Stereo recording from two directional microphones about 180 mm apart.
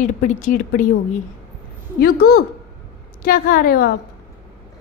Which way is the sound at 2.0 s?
55° left (ahead or behind).